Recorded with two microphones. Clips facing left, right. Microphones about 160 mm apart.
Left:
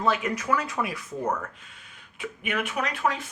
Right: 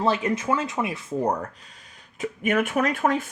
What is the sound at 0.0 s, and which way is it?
Speech, 30° right (ahead or behind).